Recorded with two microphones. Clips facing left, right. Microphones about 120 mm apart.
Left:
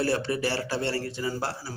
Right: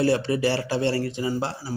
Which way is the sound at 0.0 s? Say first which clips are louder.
Right 5 dB; 20° right (ahead or behind).